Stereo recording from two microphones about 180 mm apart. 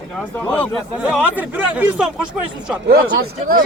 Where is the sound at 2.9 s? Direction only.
55° right (ahead or behind).